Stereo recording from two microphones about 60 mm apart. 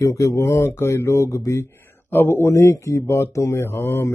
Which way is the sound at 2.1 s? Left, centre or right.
Left.